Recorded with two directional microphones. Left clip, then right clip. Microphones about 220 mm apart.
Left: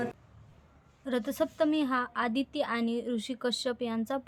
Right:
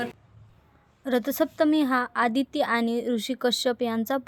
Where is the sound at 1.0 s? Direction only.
30° right (ahead or behind).